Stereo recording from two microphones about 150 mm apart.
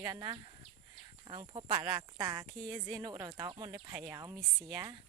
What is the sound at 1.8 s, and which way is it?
Speech, 25° right (ahead or behind).